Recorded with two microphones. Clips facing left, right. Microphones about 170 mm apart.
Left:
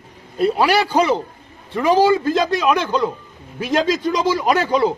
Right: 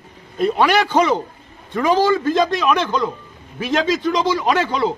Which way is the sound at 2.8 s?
10° left (ahead or behind).